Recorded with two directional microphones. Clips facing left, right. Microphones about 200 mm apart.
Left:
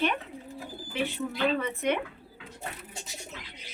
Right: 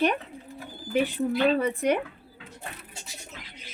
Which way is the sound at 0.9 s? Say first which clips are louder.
Right 7 dB; 40° right (ahead or behind).